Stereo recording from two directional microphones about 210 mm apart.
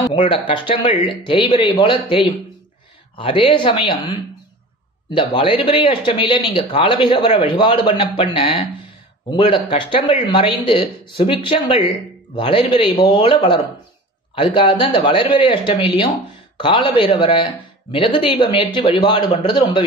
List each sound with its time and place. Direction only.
0.1 s speech: 25° left (ahead or behind)